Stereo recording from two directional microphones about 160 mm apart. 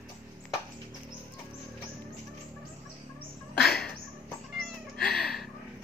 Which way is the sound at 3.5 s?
80° left.